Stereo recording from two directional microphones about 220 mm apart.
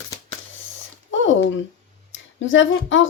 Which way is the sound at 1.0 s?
60° left (ahead or behind).